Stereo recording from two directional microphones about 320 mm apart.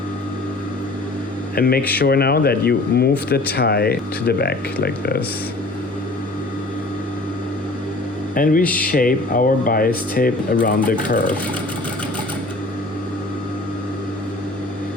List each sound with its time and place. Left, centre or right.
1.5 s speech: left
8.4 s speech: left
8.6 s speech: centre
8.9 s speech: left